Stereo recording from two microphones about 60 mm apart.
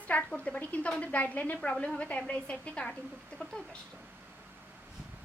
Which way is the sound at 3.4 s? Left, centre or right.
Centre.